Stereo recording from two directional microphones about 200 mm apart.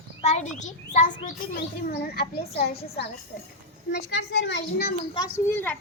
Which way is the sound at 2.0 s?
50° left (ahead or behind).